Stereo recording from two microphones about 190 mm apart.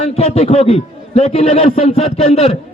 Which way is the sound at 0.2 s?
30° left (ahead or behind).